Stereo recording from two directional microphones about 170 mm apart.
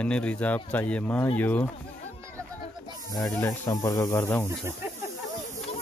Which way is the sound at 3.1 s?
20° left (ahead or behind).